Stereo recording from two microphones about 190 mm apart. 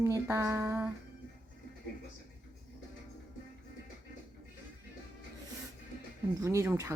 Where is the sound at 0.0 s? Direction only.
15° right (ahead or behind).